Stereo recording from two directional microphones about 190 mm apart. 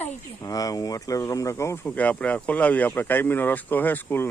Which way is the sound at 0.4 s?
20° left (ahead or behind).